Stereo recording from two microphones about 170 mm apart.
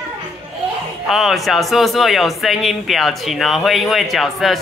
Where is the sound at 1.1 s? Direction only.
Centre (ahead or behind).